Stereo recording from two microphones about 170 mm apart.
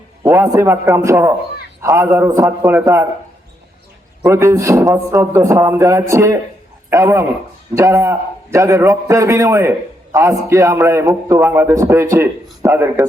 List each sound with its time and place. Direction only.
0.2 s a man's voice: 15° right (ahead or behind)
4.2 s a man's voice: 15° right (ahead or behind)